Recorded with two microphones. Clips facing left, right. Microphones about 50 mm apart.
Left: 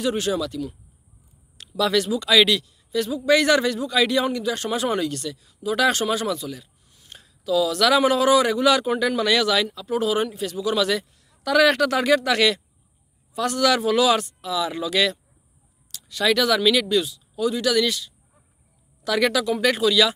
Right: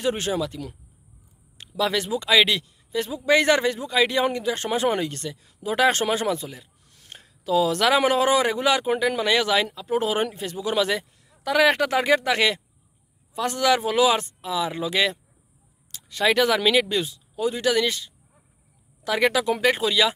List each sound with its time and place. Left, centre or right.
0.0 s a man's voice: right
1.6 s a man's voice: right